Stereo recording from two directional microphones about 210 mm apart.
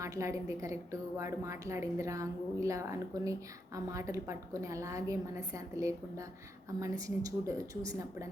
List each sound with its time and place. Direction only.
0.0 s a woman's voice: 15° right (ahead or behind)